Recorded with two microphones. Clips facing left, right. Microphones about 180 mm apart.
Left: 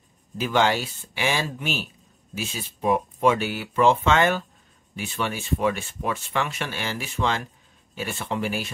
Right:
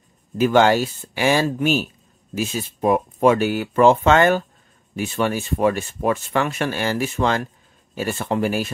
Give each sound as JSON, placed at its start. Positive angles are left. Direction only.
{"t": 0.4, "sound": "speech", "side_deg": -50}